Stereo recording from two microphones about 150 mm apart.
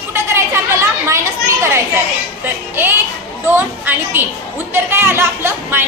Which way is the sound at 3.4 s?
15° right (ahead or behind).